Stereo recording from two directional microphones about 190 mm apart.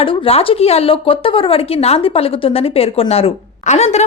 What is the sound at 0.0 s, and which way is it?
A woman's voice, 30° left (ahead or behind).